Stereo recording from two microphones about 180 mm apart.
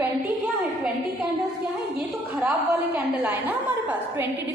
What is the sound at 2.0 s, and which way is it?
A woman's voice, 5° right (ahead or behind).